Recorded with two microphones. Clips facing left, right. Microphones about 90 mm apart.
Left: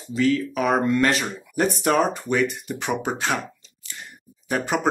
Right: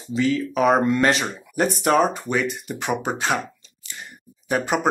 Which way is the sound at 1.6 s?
5° right (ahead or behind).